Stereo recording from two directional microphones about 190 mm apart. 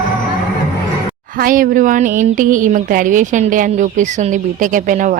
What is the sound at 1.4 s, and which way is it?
Speech, 45° right (ahead or behind).